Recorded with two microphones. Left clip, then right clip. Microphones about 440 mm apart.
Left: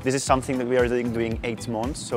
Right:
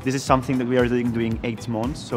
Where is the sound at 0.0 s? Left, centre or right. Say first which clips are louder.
Right 1 dB; left.